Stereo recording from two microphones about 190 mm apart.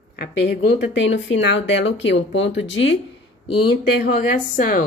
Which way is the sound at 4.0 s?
45° left (ahead or behind).